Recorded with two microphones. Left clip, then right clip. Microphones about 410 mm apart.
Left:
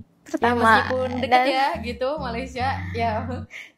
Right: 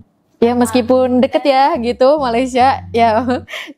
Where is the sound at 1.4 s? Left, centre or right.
Right.